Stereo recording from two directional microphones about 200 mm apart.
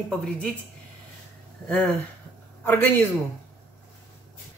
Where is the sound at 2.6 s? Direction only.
10° left (ahead or behind).